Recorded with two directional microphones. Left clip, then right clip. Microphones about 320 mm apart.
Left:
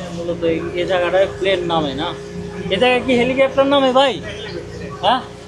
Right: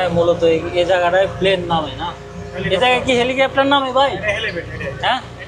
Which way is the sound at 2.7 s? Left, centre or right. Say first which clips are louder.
Right 1 dB; centre.